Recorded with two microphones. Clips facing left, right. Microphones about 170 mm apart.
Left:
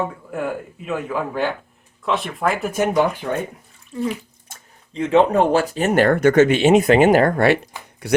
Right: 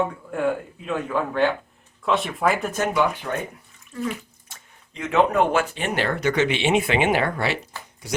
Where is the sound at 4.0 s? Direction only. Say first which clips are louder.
Left 4 dB; 30° left (ahead or behind); by 8.2 s 60° left (ahead or behind).